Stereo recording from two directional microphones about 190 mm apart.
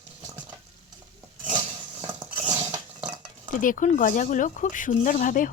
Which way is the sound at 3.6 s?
45° left (ahead or behind).